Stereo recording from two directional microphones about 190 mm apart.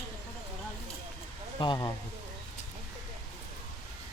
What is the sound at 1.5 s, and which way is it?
Speech, 25° left (ahead or behind).